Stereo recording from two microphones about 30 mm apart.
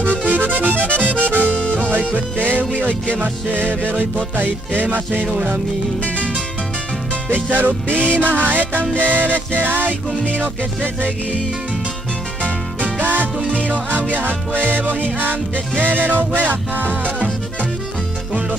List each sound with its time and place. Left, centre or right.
0.2 s music: right
4.8 s music: right
7.3 s music: right
8.9 s music: right
10.4 s music: right
13.0 s music: right
13.5 s music: right
15.1 s music: right